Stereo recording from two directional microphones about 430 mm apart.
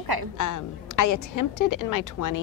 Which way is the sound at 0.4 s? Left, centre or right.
Left.